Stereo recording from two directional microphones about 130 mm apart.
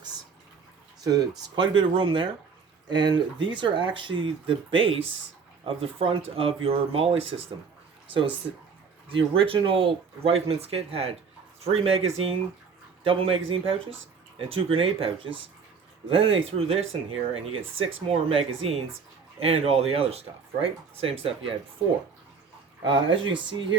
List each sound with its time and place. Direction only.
1.5 s speech: 40° right (ahead or behind)
9.0 s speech: 45° right (ahead or behind)
22.8 s speech: 40° right (ahead or behind)